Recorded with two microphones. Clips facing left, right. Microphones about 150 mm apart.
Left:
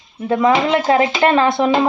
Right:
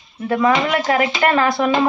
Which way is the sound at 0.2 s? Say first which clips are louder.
Left 2 dB; 20° left (ahead or behind).